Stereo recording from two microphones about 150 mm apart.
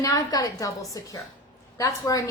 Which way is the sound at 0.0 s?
25° left (ahead or behind).